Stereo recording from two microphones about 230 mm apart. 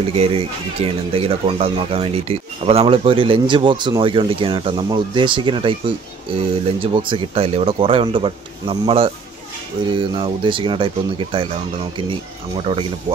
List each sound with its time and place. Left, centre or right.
0.1 s speech: right